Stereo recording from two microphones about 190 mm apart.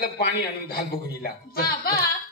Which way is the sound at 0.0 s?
55° left (ahead or behind).